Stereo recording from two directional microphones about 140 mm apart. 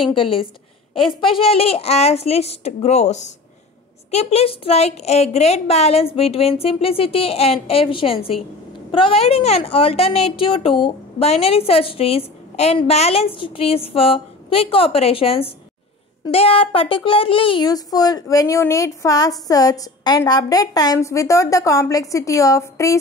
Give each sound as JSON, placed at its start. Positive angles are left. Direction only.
{"t": 0.1, "sound": "a woman's voice", "side_deg": 40}